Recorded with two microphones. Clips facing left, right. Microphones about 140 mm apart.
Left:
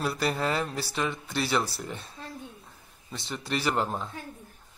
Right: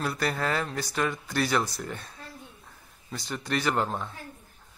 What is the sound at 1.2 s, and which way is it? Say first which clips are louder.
Speech: right 1 dB; centre (ahead or behind).